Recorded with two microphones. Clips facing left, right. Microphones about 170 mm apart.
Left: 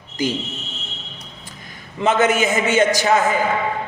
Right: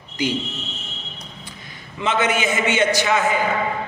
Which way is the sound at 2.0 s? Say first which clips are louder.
Left 4 dB; 40° left (ahead or behind).